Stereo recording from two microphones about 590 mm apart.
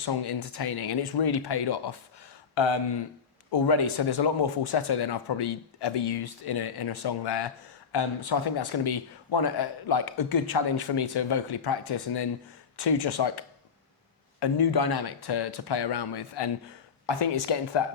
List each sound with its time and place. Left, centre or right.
0.0 s speech: left